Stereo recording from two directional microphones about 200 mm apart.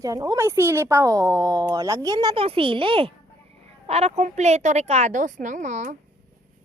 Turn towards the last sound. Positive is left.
turn(degrees=-35)  # may be behind; listen again after turning